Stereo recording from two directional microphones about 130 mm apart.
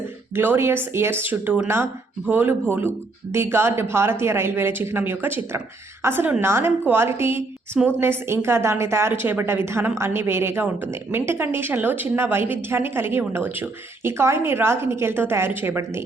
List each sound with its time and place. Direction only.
0.3 s a woman's voice: 15° right (ahead or behind)